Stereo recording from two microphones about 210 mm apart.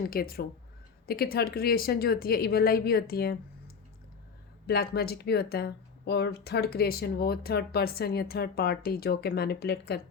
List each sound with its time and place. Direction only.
0.1 s speech: 45° left (ahead or behind)
4.6 s speech: 50° left (ahead or behind)